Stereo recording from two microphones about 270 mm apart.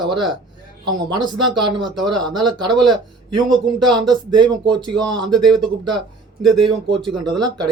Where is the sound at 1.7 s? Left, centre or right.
Centre.